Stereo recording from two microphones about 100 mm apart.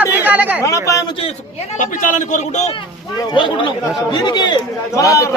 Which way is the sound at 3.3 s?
55° left (ahead or behind).